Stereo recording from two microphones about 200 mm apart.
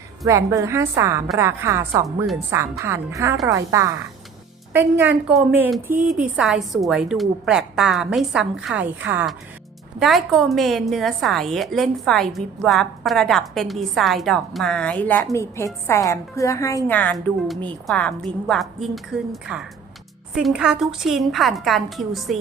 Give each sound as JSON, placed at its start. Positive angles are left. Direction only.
{"t": 0.3, "sound": "a woman's voice", "side_deg": -15}